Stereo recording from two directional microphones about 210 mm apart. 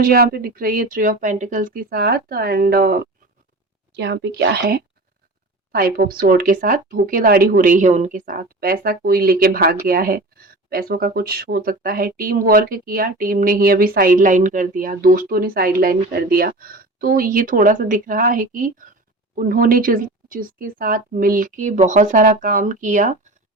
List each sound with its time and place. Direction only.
0.0 s a woman's voice: 45° right (ahead or behind)